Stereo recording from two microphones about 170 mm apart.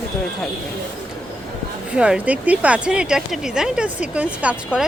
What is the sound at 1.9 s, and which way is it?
Speech, 5° right (ahead or behind).